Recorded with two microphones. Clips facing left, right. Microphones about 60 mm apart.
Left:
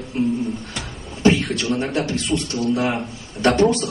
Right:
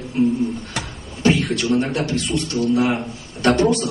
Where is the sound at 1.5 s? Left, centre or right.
Centre.